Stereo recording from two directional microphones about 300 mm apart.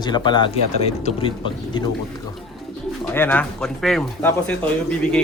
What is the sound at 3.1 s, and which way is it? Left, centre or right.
Speech, centre.